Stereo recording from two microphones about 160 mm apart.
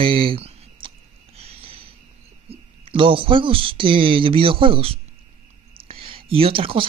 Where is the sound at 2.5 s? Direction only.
35° right (ahead or behind).